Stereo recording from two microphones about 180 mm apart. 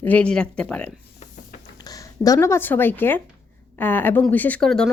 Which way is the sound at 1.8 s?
20° left (ahead or behind).